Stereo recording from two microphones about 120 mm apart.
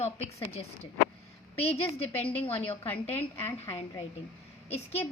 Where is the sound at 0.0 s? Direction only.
60° left (ahead or behind).